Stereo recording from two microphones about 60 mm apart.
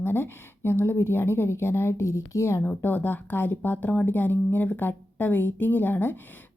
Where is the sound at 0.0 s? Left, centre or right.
Left.